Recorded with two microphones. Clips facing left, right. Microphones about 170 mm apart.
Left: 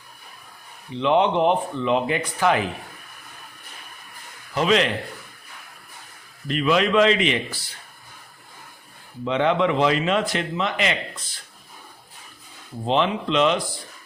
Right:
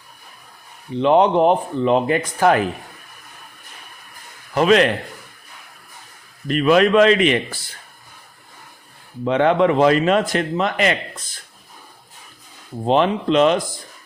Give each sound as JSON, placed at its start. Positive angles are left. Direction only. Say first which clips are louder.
{"t": 0.9, "sound": "a man's voice", "louder": "right 5 dB", "side_deg": -40}
{"t": 4.5, "sound": "a man's voice", "louder": "right 5 dB", "side_deg": -55}
{"t": 6.5, "sound": "a man's voice", "louder": "right 5 dB", "side_deg": -50}
{"t": 9.2, "sound": "a man's voice", "louder": "right 5 dB", "side_deg": -50}
{"t": 12.8, "sound": "a man's voice", "louder": "right 5 dB", "side_deg": -45}